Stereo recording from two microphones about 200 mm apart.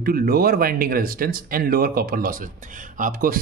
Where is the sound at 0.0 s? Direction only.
45° right (ahead or behind).